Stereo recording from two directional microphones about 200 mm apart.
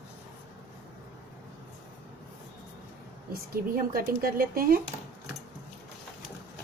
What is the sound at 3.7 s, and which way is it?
A woman's voice, 50° right (ahead or behind).